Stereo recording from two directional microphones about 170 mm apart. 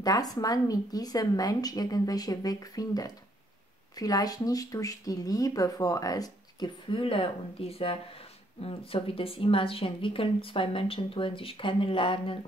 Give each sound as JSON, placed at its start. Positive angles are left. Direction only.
{"t": 0.0, "sound": "speech", "side_deg": 20}